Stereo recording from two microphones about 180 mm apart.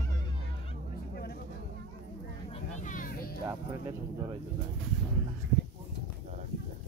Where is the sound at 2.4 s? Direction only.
40° left (ahead or behind).